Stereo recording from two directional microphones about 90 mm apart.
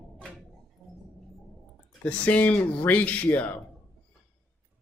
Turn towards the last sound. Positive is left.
turn(degrees=20)  # may be behind; listen again after turning